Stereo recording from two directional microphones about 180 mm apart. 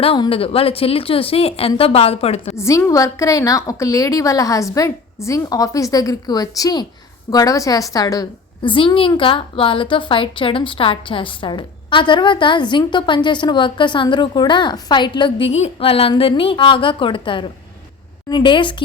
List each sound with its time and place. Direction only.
0.0 s a woman's voice: 30° left (ahead or behind)
2.6 s a woman's voice: 15° left (ahead or behind)